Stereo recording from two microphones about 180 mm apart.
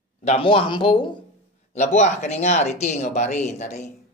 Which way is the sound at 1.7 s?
40° left (ahead or behind).